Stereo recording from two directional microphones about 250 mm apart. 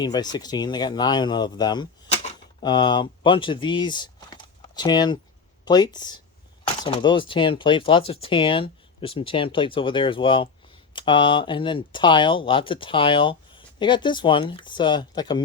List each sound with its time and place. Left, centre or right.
0.0 s speech: centre